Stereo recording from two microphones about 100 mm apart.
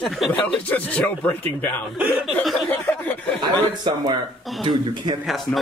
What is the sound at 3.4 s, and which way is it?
Speech, 45° right (ahead or behind).